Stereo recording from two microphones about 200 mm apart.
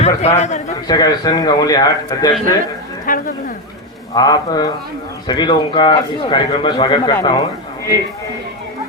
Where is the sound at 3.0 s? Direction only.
45° left (ahead or behind).